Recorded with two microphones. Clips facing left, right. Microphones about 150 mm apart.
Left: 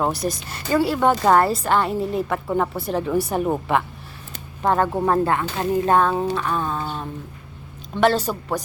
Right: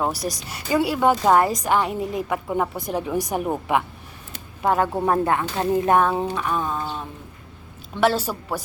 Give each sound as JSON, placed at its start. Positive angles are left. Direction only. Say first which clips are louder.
{"t": 0.0, "sound": "speech", "louder": "left 2 dB", "side_deg": -10}
{"t": 4.6, "sound": "speech", "louder": "left 1 dB", "side_deg": -10}
{"t": 8.0, "sound": "speech", "louder": "left 2 dB", "side_deg": -10}